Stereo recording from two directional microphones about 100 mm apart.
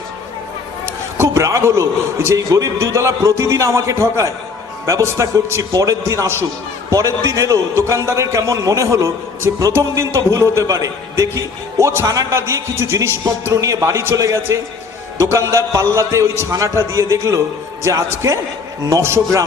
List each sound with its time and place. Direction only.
0.9 s a man's voice: 25° right (ahead or behind)